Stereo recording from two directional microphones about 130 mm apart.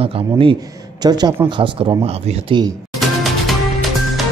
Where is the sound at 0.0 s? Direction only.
45° right (ahead or behind).